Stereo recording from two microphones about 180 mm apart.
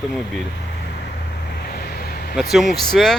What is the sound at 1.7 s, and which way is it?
Vehicle, 60° left (ahead or behind).